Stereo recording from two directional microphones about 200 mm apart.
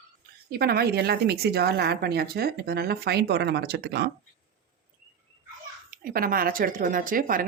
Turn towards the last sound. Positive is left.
turn(degrees=-45)  # may be behind; listen again after turning